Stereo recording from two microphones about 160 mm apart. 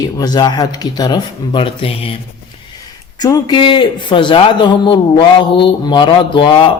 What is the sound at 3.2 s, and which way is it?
A man's voice, 25° left (ahead or behind).